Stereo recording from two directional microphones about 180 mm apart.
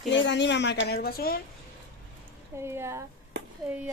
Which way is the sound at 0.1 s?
85° left.